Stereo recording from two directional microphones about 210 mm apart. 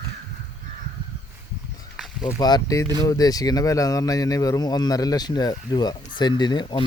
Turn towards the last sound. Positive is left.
turn(degrees=20)  # may be behind; listen again after turning